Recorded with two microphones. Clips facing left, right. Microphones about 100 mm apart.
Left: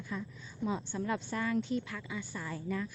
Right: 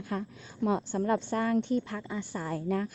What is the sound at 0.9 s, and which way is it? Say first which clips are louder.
A woman's voice: right 7 dB; 40° right (ahead or behind).